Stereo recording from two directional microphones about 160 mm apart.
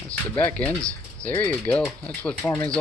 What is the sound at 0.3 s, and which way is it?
Speech, 10° left (ahead or behind).